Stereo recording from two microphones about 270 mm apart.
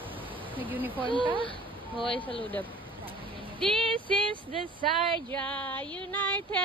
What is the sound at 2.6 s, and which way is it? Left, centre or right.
Vehicle, centre.